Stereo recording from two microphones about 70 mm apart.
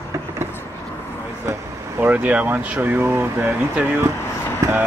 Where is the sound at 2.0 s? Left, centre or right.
Right.